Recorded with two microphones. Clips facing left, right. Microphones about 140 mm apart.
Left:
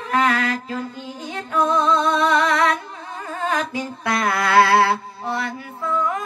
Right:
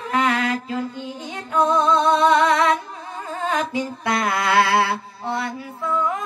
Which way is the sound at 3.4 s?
20° right (ahead or behind).